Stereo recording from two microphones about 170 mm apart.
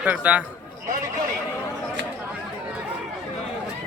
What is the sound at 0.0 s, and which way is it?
Speech, 10° right (ahead or behind).